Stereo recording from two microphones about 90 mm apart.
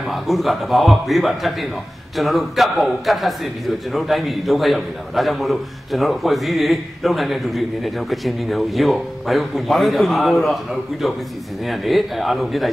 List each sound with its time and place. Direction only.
0.1 s a man's voice: centre (ahead or behind)